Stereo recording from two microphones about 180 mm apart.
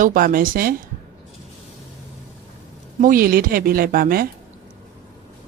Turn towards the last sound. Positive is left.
turn(degrees=-55)  # may be behind; listen again after turning